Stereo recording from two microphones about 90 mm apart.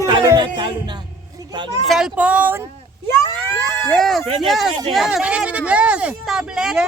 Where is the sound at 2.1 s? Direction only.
15° right (ahead or behind).